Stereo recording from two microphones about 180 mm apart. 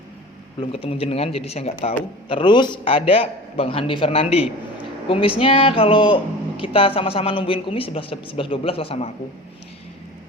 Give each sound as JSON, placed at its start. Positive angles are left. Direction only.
{"t": 0.6, "sound": "a woman's voice", "side_deg": 30}